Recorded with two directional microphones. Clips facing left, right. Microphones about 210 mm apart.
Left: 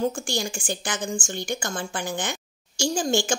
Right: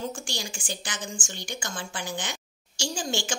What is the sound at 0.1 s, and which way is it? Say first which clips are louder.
A woman's voice: left 7 dB; 50° left (ahead or behind).